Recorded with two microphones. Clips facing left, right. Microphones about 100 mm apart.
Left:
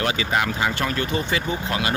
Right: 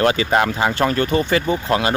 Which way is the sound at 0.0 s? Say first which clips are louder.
Right 6 dB; 45° right (ahead or behind).